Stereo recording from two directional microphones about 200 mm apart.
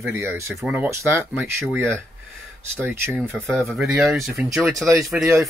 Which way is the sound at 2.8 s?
10° right (ahead or behind).